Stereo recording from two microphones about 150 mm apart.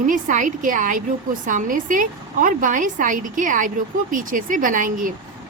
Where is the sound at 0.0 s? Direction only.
55° right (ahead or behind).